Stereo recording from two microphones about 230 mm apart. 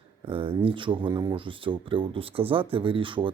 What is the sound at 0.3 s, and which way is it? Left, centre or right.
Speech, right.